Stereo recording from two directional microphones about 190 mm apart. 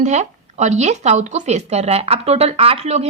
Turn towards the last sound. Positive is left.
turn(degrees=-35)  # may be behind; listen again after turning